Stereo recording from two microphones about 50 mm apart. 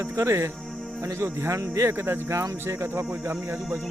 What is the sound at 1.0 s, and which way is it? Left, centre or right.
Speech, right.